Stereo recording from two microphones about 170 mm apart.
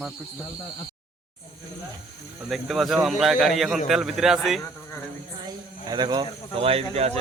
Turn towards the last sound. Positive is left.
turn(degrees=-40)  # may be behind; listen again after turning